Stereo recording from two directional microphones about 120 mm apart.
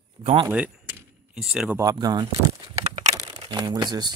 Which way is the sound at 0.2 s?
45° right (ahead or behind).